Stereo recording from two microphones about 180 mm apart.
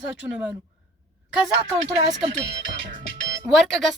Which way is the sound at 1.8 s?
35° right (ahead or behind).